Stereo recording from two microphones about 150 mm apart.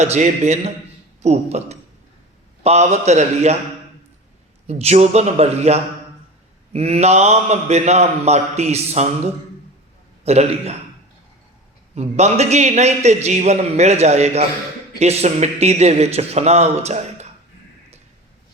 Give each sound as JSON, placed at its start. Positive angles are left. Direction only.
{"t": 0.0, "sound": "a man's voice", "side_deg": -45}
{"t": 4.6, "sound": "a man's voice", "side_deg": -45}
{"t": 11.9, "sound": "a man's voice", "side_deg": -45}